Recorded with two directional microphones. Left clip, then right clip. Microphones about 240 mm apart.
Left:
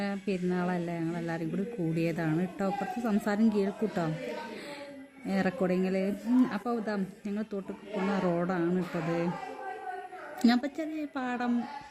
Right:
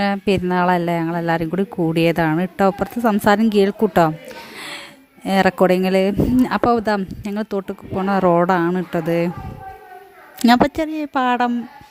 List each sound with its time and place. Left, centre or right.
0.0 s speech: right
5.2 s speech: right
10.4 s speech: right